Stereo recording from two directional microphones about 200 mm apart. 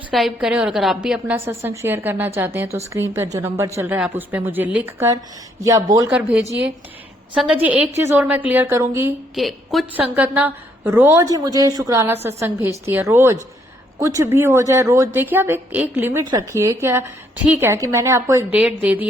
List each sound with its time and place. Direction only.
0.1 s a woman's voice: centre (ahead or behind); by 6.1 s 15° right (ahead or behind)
7.6 s a woman's voice: 5° right (ahead or behind)
9.3 s a woman's voice: centre (ahead or behind)